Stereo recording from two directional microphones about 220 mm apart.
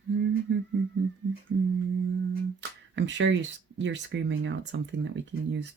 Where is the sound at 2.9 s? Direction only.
55° right (ahead or behind).